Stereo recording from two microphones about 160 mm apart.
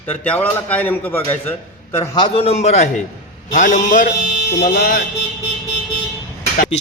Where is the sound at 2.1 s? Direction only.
35° left (ahead or behind); by 4.1 s 55° left (ahead or behind).